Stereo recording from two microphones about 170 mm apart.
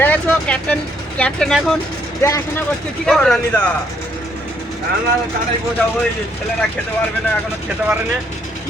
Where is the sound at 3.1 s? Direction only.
Centre (ahead or behind).